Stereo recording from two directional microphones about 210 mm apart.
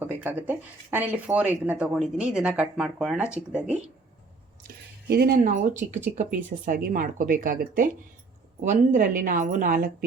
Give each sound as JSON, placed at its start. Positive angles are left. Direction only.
{"t": 0.0, "sound": "speech", "side_deg": -10}
{"t": 5.0, "sound": "speech", "side_deg": -50}